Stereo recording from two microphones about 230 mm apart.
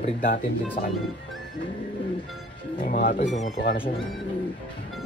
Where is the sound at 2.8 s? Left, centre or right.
Left.